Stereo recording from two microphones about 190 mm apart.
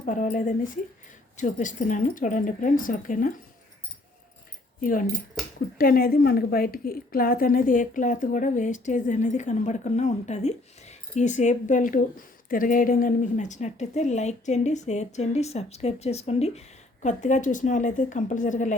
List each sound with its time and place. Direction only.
0.0 s a woman's voice: 40° left (ahead or behind)
4.8 s a woman's voice: 45° left (ahead or behind)